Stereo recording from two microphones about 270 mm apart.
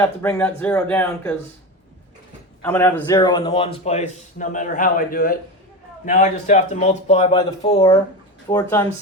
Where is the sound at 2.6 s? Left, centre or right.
Centre.